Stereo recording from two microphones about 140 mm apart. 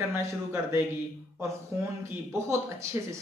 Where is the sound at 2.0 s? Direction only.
20° right (ahead or behind).